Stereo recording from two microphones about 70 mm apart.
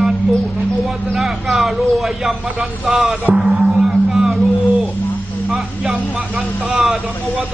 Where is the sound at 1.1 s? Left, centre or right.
Centre.